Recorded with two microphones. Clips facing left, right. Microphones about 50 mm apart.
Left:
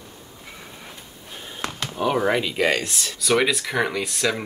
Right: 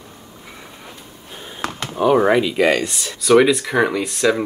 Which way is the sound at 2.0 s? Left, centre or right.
Centre.